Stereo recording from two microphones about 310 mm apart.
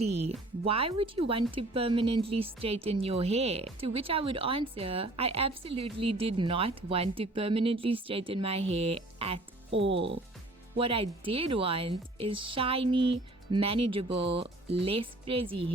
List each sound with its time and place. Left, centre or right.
0.0 s speech: centre
9.9 s speech: right
10.8 s speech: centre